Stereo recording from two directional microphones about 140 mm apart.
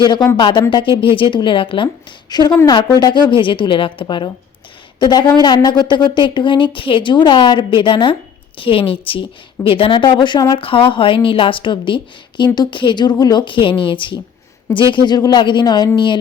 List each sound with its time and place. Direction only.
0.3 s speech: 35° left (ahead or behind)